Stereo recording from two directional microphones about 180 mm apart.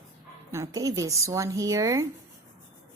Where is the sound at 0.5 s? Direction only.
15° right (ahead or behind).